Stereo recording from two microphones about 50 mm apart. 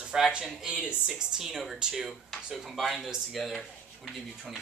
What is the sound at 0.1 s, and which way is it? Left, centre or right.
Speech, centre.